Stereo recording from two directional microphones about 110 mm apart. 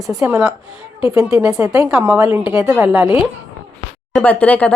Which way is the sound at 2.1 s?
15° right (ahead or behind).